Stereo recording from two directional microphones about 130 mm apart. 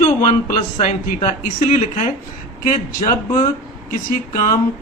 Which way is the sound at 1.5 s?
75° left (ahead or behind).